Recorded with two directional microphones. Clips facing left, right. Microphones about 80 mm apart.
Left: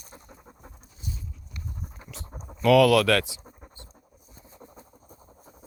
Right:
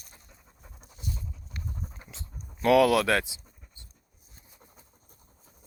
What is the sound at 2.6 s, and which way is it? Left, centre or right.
Speech, right.